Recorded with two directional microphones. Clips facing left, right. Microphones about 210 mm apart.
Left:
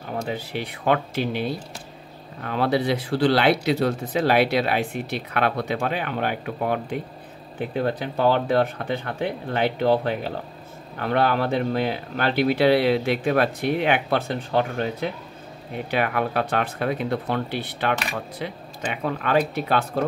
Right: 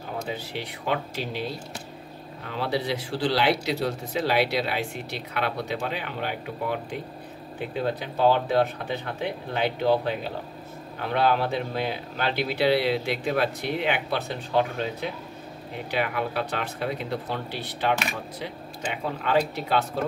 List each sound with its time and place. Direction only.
0.3 s speech: 55° left (ahead or behind)
15.9 s speech: 55° left (ahead or behind)